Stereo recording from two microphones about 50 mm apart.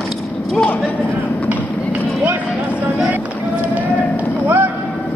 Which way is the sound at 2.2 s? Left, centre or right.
Right.